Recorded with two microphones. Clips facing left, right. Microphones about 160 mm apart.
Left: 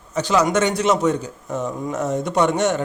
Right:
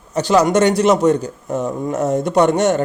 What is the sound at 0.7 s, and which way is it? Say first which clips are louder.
Speech: right 5 dB; 35° right (ahead or behind).